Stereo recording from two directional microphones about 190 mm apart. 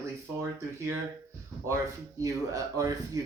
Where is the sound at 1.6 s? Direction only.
15° right (ahead or behind).